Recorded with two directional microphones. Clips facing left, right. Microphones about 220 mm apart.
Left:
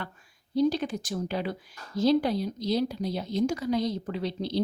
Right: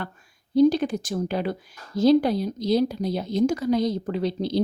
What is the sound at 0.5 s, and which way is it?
A woman's voice, 50° right (ahead or behind).